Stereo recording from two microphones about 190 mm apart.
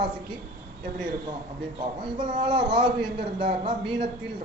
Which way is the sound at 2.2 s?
25° right (ahead or behind).